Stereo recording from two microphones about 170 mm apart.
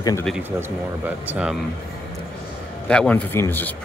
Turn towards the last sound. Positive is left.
turn(degrees=15)  # may be behind; listen again after turning